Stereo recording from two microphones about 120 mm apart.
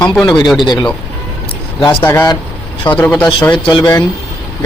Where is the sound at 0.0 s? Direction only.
Centre (ahead or behind).